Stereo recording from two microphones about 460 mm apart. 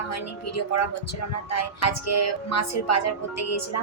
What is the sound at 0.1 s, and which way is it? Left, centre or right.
Speech, left.